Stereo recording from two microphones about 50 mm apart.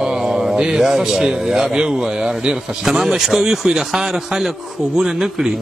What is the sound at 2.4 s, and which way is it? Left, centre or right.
A man's voice, centre.